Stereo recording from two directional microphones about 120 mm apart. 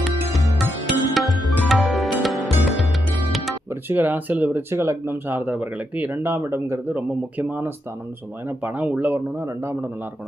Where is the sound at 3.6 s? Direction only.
20° right (ahead or behind).